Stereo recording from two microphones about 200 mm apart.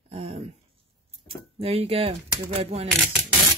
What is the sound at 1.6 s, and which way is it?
Speech, 30° right (ahead or behind).